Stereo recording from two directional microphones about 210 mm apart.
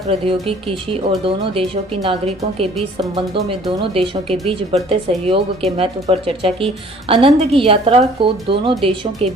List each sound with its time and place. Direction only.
0.1 s speech: 25° right (ahead or behind)